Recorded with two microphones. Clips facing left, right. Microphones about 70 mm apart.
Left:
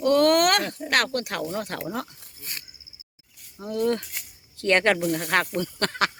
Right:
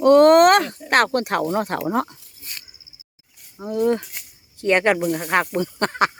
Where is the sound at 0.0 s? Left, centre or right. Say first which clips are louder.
Right 8 dB; right.